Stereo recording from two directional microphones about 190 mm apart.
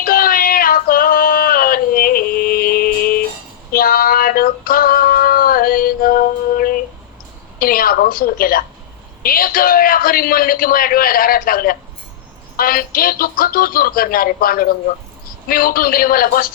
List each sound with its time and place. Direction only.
0.0 s female singing: 50° left (ahead or behind)
7.6 s a woman's voice: 50° left (ahead or behind)